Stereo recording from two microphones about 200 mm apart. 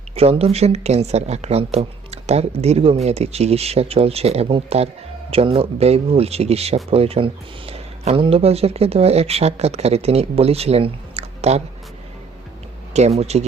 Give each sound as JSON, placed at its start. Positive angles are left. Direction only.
{"t": 0.2, "sound": "speech", "side_deg": -30}
{"t": 12.9, "sound": "speech", "side_deg": -35}